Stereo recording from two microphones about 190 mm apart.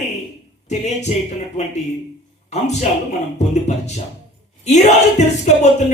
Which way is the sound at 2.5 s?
35° left (ahead or behind).